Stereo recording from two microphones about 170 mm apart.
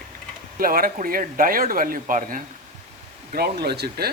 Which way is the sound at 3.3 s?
70° right (ahead or behind).